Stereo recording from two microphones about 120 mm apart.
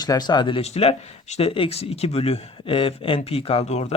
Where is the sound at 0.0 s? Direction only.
35° left (ahead or behind).